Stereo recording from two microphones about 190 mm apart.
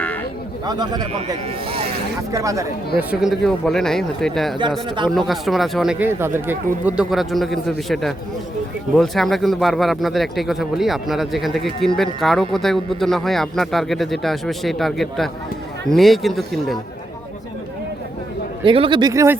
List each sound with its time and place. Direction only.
0.6 s speech: 20° right (ahead or behind)
3.0 s speech: 5° right (ahead or behind)
18.6 s speech: 25° right (ahead or behind)